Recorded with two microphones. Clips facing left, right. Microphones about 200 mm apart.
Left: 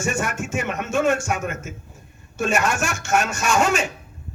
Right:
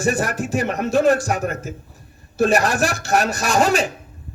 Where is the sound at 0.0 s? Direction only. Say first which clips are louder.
Right 4 dB; 35° right (ahead or behind).